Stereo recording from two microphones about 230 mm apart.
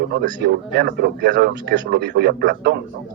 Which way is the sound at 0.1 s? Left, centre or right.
Right.